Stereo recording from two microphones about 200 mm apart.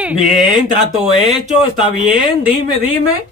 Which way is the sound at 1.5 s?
40° right (ahead or behind).